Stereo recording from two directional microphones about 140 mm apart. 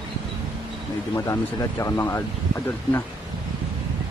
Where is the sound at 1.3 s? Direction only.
20° left (ahead or behind).